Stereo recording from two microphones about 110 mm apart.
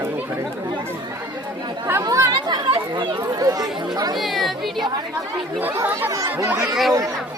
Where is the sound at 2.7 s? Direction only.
45° right (ahead or behind).